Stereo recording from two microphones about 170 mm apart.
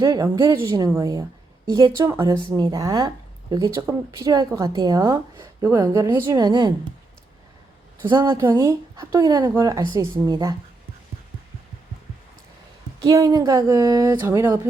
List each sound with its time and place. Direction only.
0.0 s speech: 20° right (ahead or behind)
8.3 s speech: 15° right (ahead or behind)
13.1 s speech: 20° right (ahead or behind)